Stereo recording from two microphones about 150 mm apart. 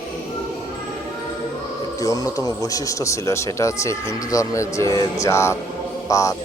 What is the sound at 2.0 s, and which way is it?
Speech, 20° left (ahead or behind).